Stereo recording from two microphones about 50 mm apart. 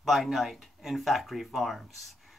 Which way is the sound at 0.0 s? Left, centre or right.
Centre.